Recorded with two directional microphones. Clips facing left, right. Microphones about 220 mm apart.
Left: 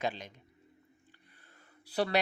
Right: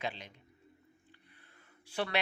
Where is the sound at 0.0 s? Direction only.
45° left (ahead or behind).